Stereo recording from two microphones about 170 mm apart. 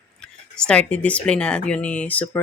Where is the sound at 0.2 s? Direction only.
5° left (ahead or behind).